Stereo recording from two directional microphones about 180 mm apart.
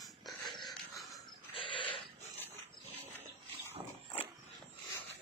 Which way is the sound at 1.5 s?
30° left (ahead or behind).